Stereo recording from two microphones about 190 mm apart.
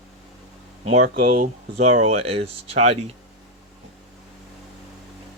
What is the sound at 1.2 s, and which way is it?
Speech, 35° right (ahead or behind).